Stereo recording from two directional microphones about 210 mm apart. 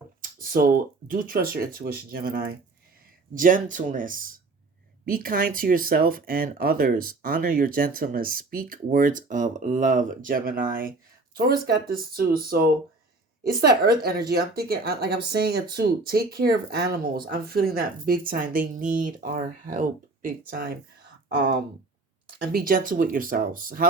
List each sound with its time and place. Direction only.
0.2 s speech: 40° right (ahead or behind)
21.2 s speech: 55° right (ahead or behind)
22.4 s speech: 45° right (ahead or behind)